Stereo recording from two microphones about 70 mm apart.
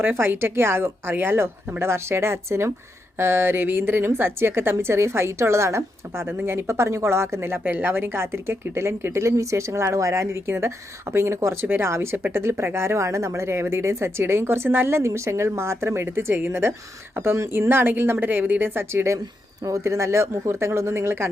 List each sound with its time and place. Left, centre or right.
0.0 s speech: right